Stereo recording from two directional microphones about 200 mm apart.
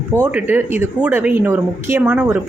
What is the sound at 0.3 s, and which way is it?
Speech, 10° right (ahead or behind).